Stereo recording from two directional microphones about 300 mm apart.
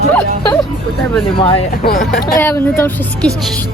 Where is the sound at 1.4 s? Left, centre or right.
Centre.